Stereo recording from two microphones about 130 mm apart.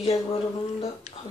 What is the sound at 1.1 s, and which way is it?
Speech, 65° left (ahead or behind).